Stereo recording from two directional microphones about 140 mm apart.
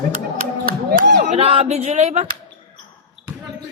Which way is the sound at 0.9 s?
65° right (ahead or behind).